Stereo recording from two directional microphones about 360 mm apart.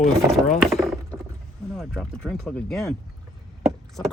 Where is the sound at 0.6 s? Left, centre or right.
Centre.